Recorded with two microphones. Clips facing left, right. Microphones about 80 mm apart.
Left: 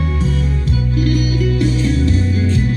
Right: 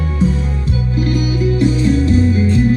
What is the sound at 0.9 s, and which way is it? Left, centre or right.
Music, right.